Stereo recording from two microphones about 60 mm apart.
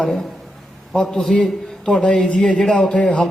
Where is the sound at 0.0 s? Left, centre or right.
Centre.